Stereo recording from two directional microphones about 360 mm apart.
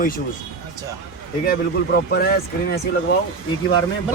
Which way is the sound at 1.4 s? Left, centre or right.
Left.